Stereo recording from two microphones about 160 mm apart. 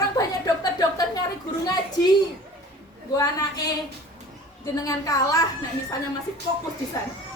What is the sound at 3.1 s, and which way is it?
Speech, 25° left (ahead or behind).